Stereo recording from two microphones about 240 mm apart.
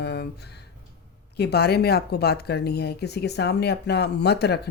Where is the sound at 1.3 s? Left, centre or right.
Left.